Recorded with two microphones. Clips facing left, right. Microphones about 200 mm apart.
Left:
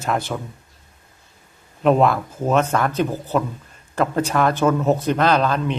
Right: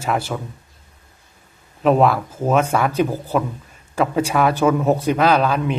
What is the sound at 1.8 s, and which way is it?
A man's voice, centre (ahead or behind).